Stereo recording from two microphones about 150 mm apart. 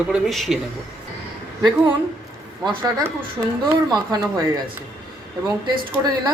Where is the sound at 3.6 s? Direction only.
25° right (ahead or behind).